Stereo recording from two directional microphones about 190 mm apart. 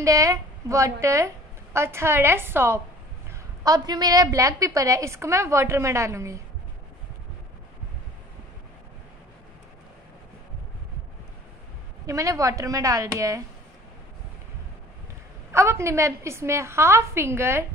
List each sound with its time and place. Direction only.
0.0 s a woman's voice: 15° right (ahead or behind)
12.1 s a woman's voice: 15° right (ahead or behind)
15.5 s a woman's voice: 15° right (ahead or behind)